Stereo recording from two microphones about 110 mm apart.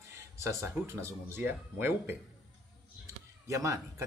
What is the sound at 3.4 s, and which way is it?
Speech, 30° right (ahead or behind).